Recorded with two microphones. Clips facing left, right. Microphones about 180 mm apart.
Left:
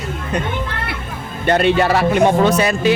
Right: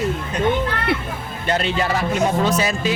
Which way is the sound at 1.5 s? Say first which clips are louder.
Left 7 dB; 60° left (ahead or behind).